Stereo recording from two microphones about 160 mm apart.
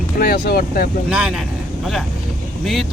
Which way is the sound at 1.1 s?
5° right (ahead or behind).